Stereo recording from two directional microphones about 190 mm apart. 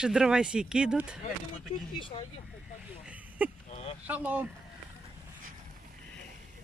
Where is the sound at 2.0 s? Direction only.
25° left (ahead or behind).